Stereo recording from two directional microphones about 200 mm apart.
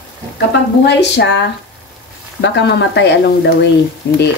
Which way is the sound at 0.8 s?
60° left (ahead or behind).